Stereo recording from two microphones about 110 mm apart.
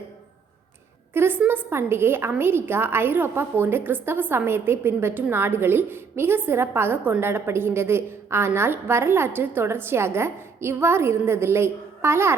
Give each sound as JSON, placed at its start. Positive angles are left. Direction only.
{"t": 1.1, "sound": "a woman's voice", "side_deg": -20}